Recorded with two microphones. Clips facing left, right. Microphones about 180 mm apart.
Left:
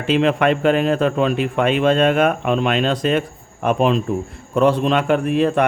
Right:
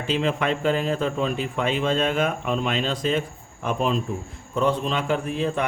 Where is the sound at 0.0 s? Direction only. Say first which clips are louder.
Left 7 dB; 70° left (ahead or behind).